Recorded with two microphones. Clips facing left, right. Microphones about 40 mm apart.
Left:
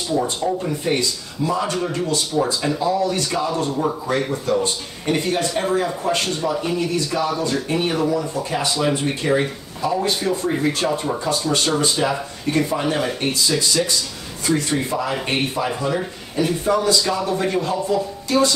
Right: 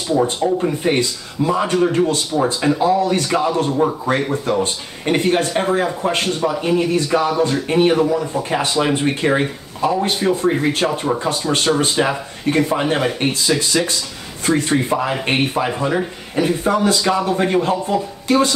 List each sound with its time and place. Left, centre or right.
0.1 s speech: centre
0.6 s speech: right
2.8 s speech: right
9.8 s speech: right
10.1 s speech: right